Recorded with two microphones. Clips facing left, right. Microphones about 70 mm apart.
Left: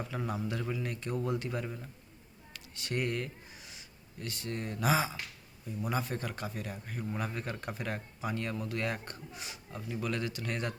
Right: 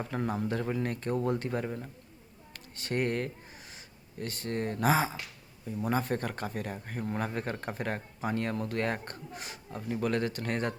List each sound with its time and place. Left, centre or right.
0.0 s speech: right